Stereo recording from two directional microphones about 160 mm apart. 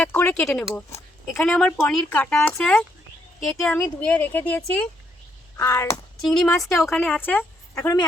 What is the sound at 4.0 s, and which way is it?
Speech, 10° left (ahead or behind).